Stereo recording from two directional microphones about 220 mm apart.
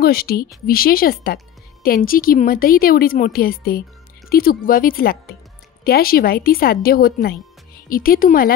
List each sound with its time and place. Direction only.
0.0 s a woman's voice: 45° left (ahead or behind)